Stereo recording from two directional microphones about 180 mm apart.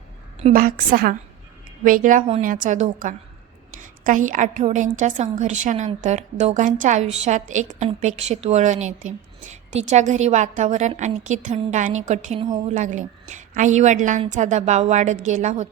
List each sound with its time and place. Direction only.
0.5 s a woman's voice: 55° right (ahead or behind)